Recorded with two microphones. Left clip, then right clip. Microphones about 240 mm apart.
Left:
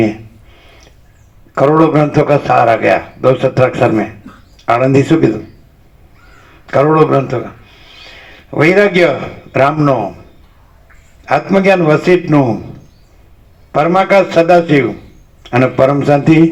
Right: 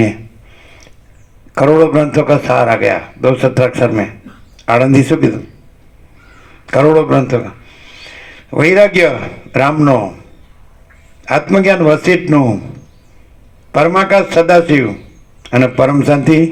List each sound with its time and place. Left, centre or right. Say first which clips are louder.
1.5 s a man's voice: right 1 dB; right
6.7 s a man's voice: even; right
11.2 s a man's voice: even; right
13.7 s a man's voice: even; right